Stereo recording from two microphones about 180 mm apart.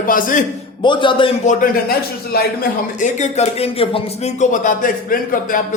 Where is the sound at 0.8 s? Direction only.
25° left (ahead or behind).